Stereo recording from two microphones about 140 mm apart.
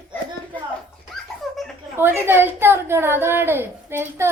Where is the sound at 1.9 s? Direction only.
15° right (ahead or behind).